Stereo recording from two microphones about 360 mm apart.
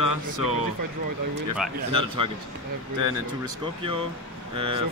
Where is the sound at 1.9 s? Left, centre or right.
Centre.